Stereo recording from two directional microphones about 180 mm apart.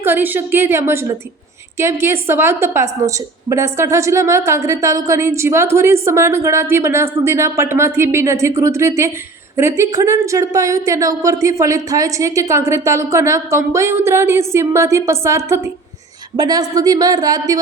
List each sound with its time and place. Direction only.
0.0 s a woman's voice: 10° right (ahead or behind)